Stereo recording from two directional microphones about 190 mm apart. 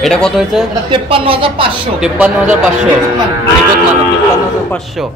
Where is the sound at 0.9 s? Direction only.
30° right (ahead or behind).